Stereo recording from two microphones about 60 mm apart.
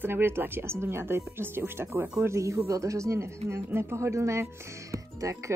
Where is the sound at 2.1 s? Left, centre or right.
Right.